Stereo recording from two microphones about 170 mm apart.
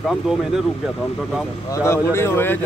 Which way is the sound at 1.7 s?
15° left (ahead or behind).